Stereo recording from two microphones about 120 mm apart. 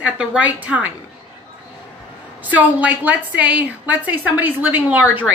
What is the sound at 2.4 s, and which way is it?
A woman's voice, 15° right (ahead or behind).